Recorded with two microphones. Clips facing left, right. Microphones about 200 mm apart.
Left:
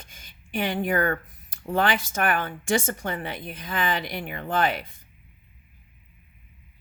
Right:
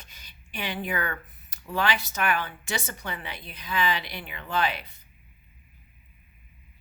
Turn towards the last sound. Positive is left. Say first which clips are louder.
# left 3 dB
turn(degrees=50)  # may be behind; listen again after turning